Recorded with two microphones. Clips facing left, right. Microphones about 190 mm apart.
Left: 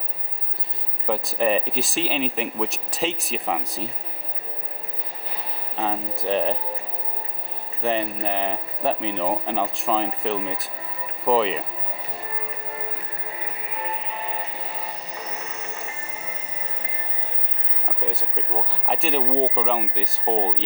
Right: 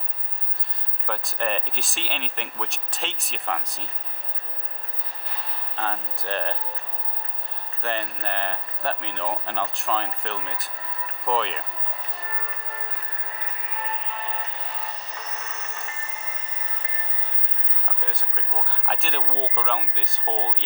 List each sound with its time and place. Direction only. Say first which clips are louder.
1.0 s speech: left 6 dB; centre (ahead or behind)
5.7 s speech: left 4 dB; 5° left (ahead or behind)
7.8 s speech: left 6 dB; centre (ahead or behind)
13.4 s music: left 2 dB; 10° left (ahead or behind)
18.0 s speech: left 8 dB; 5° left (ahead or behind)
19.3 s speech: left 8 dB; 35° left (ahead or behind)
19.5 s speech: left 5 dB; 5° left (ahead or behind)
20.2 s speech: left 6 dB; 35° left (ahead or behind)